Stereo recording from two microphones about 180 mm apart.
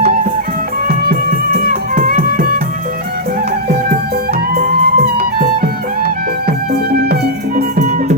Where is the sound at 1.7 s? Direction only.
55° right (ahead or behind).